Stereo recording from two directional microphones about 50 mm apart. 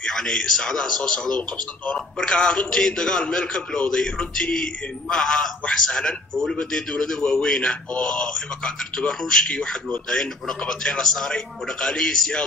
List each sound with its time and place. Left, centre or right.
0.0 s a man's voice: centre